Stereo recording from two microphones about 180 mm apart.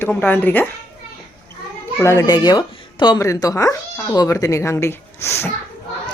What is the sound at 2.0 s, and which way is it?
Speech, 15° left (ahead or behind).